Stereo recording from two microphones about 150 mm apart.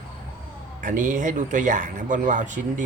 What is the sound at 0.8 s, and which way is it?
Speech, 60° right (ahead or behind).